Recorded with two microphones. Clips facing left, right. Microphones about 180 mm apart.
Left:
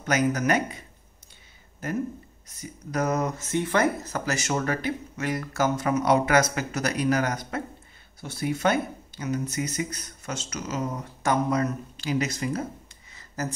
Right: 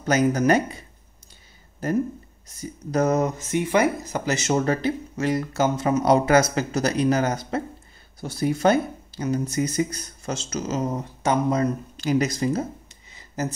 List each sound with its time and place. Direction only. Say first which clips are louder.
0.0 s speech: right 4 dB; 30° right (ahead or behind)
2.4 s speech: right 7 dB; 30° right (ahead or behind)
3.5 s speech: right 3 dB; 15° right (ahead or behind)
12.0 s speech: right 5 dB; 40° right (ahead or behind)